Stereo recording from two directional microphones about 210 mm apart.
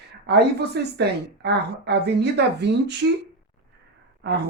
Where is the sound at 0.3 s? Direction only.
50° right (ahead or behind).